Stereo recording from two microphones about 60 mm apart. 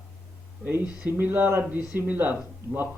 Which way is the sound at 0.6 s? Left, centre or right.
Right.